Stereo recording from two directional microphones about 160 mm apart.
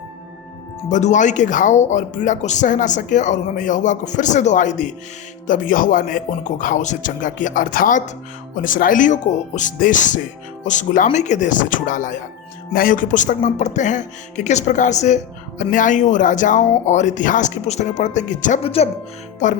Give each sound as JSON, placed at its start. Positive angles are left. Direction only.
{"t": 0.9, "sound": "speech", "side_deg": 50}
{"t": 19.4, "sound": "speech", "side_deg": 50}